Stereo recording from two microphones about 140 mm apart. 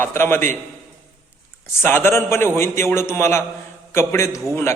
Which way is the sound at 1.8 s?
15° left (ahead or behind).